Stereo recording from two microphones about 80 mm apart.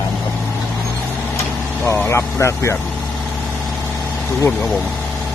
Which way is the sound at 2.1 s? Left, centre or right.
Left.